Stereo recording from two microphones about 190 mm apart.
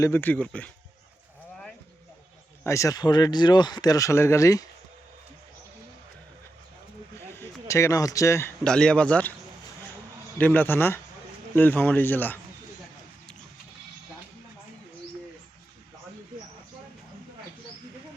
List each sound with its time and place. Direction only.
0.0 s speech: 10° left (ahead or behind)
2.6 s speech: 15° left (ahead or behind)
7.3 s speech: 15° left (ahead or behind)
10.3 s speech: 10° left (ahead or behind)